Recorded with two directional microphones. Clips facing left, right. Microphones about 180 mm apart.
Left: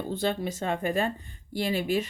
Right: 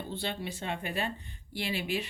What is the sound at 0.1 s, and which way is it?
Speech, 45° left (ahead or behind).